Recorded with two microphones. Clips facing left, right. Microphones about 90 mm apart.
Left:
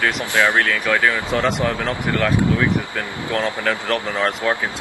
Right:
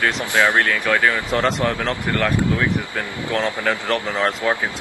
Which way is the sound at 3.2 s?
20° right (ahead or behind).